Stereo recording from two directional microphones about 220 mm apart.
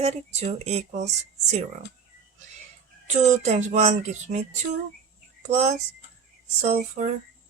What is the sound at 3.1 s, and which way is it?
Speech, 30° right (ahead or behind).